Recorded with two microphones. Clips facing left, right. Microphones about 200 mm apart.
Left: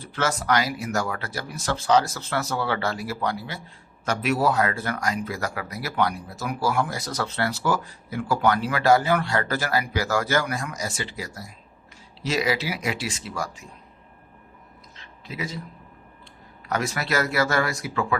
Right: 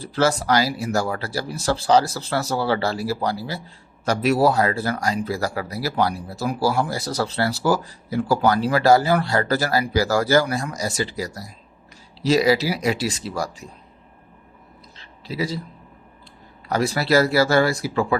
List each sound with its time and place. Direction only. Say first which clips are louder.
0.0 s speech: right 6 dB; 35° right (ahead or behind)
14.9 s a sound: right 7 dB; 35° right (ahead or behind)
16.6 s speech: right 6 dB; 30° right (ahead or behind)